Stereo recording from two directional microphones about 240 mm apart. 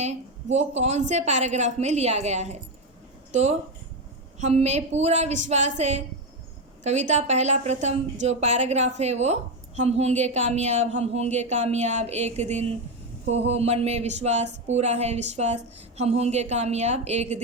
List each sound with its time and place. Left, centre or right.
0.0 s a woman's voice: right